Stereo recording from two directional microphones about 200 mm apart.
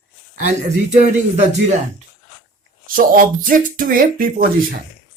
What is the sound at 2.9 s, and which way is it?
Speech, 45° right (ahead or behind).